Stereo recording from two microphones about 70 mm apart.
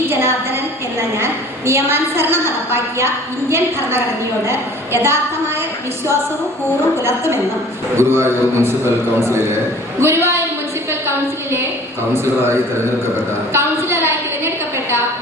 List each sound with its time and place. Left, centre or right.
0.1 s a sound: right
1.2 s a woman's voice: right
4.4 s a woman's voice: right
7.9 s a woman's voice: right
10.0 s a woman's voice: right
12.1 s a woman's voice: right
13.5 s a sound: right